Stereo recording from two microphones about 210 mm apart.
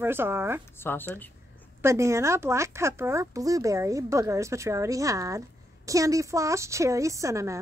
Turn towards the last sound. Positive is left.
turn(degrees=-15)  # may be behind; listen again after turning